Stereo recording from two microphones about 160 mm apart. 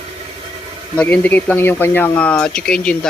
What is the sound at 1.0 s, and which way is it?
Speech, 10° left (ahead or behind).